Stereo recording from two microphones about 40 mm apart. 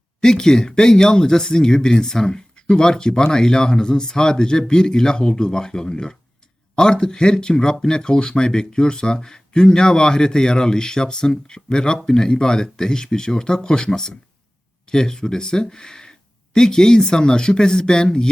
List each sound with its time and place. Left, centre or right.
0.2 s speech: centre